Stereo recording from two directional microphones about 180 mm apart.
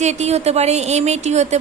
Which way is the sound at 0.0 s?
40° right (ahead or behind).